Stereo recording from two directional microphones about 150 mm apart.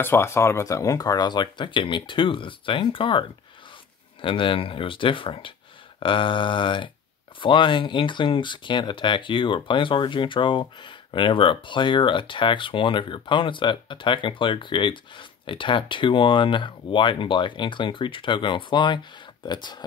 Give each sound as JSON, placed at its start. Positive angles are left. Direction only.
{"t": 0.0, "sound": "speech", "side_deg": 15}